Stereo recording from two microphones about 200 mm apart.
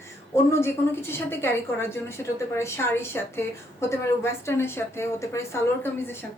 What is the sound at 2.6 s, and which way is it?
A woman's voice, 15° left (ahead or behind).